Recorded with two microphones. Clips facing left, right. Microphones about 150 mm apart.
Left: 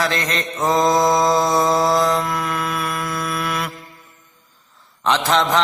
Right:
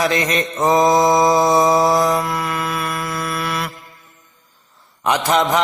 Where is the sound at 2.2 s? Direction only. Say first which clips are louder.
Right 1 dB; centre (ahead or behind).